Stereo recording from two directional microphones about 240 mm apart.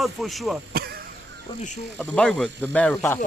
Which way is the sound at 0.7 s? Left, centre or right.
Right.